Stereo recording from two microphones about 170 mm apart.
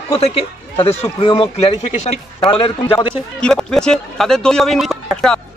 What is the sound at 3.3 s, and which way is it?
Speech, 5° left (ahead or behind).